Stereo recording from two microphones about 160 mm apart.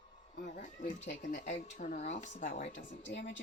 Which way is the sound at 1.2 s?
55° left (ahead or behind).